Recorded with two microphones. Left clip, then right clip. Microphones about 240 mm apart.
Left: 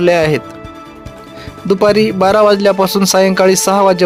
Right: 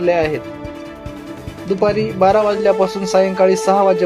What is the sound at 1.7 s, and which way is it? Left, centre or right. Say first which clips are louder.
Speech: left 6 dB; left.